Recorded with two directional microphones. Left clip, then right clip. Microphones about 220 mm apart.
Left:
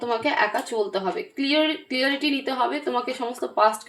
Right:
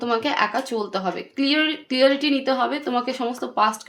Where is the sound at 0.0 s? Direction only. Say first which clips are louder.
Right 1 dB; 45° right (ahead or behind).